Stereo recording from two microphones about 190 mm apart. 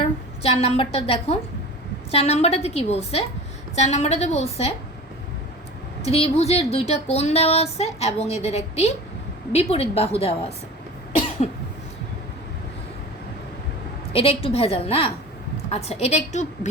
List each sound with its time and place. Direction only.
0.4 s speech: 30° left (ahead or behind)
6.0 s speech: 30° left (ahead or behind)
14.1 s speech: 30° left (ahead or behind)